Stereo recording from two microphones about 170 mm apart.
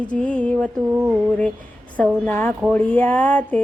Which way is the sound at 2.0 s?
10° left (ahead or behind).